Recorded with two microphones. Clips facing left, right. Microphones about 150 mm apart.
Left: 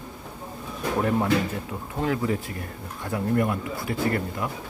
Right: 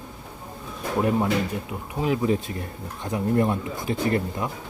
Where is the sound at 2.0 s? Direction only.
20° right (ahead or behind).